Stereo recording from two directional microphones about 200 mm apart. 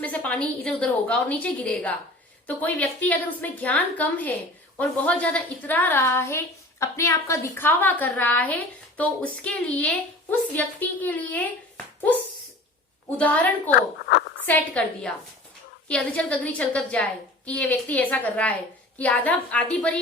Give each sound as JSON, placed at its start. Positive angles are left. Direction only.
{"t": 0.0, "sound": "a woman's voice", "side_deg": 5}
{"t": 13.1, "sound": "a woman's voice", "side_deg": 10}
{"t": 13.7, "sound": "speech", "side_deg": 60}
{"t": 14.4, "sound": "a woman's voice", "side_deg": 5}